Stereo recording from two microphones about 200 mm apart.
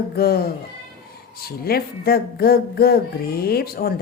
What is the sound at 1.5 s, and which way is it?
Speech, 50° left (ahead or behind).